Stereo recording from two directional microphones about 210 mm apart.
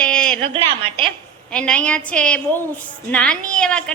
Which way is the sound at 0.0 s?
5° left (ahead or behind).